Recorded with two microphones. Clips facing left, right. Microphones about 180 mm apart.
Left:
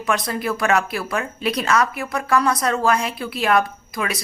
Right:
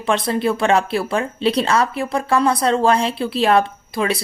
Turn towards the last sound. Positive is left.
turn(degrees=-30)  # may be behind; listen again after turning